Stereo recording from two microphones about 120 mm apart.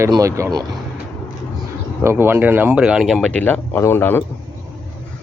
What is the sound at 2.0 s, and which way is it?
Speech, 20° right (ahead or behind).